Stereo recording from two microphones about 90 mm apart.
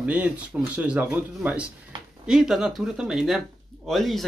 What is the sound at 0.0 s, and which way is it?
Speech, 15° right (ahead or behind).